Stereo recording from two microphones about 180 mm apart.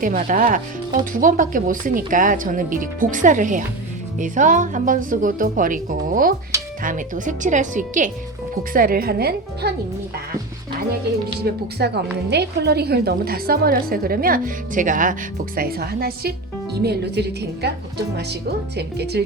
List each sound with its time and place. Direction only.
0.0 s a woman's voice: 50° right (ahead or behind)
11.5 s a woman's voice: 65° right (ahead or behind)